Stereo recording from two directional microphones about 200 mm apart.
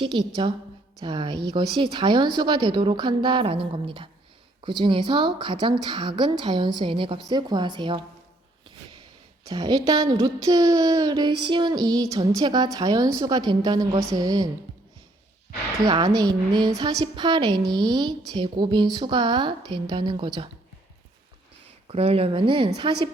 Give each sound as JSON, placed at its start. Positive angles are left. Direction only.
{"t": 0.0, "sound": "a woman's voice", "side_deg": -25}
{"t": 9.4, "sound": "a woman's voice", "side_deg": -20}
{"t": 15.9, "sound": "a woman's voice", "side_deg": -20}
{"t": 21.8, "sound": "a woman's voice", "side_deg": -30}